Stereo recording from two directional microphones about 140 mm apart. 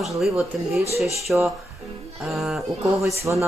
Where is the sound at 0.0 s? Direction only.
Centre (ahead or behind).